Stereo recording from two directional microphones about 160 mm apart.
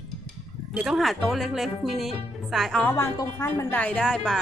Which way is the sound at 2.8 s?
15° left (ahead or behind).